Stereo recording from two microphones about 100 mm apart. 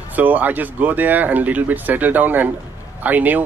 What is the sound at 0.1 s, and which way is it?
Speech, 15° right (ahead or behind).